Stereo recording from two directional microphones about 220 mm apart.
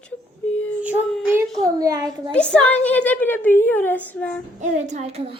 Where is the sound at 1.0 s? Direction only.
Centre (ahead or behind).